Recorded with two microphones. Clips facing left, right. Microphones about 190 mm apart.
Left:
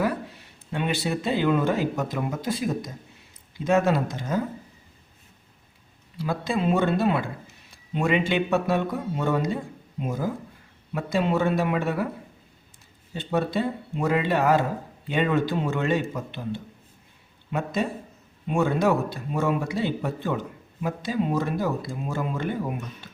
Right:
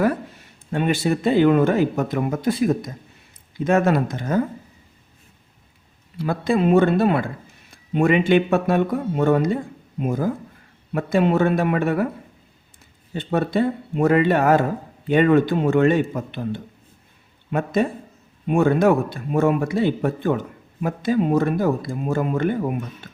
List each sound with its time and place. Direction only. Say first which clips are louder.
0.7 s speech: right 6 dB; 45° right (ahead or behind)
6.1 s a man's voice: right 6 dB; 55° right (ahead or behind)
13.1 s a man's voice: right 5 dB; 55° right (ahead or behind)